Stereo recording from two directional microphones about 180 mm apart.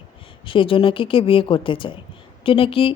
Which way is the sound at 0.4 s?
30° left (ahead or behind).